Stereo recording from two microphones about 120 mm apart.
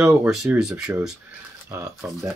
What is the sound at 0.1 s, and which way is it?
Speech, 5° right (ahead or behind).